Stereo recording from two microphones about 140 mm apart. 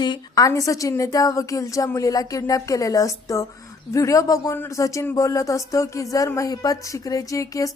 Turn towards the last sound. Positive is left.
turn(degrees=25)  # may be behind; listen again after turning